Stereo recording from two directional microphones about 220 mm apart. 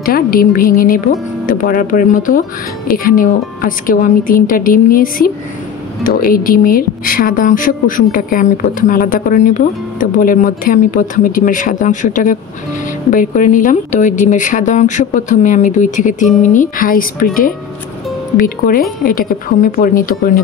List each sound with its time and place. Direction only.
0.0 s speech: 40° left (ahead or behind)
18.7 s speech: 40° left (ahead or behind)